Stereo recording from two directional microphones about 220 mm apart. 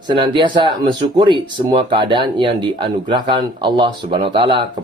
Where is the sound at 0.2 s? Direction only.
20° right (ahead or behind).